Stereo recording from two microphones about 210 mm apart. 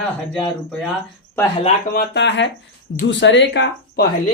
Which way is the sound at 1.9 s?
55° left (ahead or behind).